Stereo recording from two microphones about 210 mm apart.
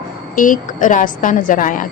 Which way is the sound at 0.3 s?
40° left (ahead or behind).